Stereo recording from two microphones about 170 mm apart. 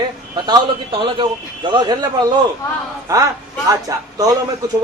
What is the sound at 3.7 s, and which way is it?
Speech, 20° right (ahead or behind).